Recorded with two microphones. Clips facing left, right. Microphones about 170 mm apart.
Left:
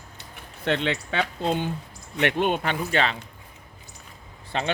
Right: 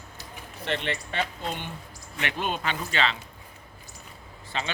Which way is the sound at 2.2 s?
60° left (ahead or behind).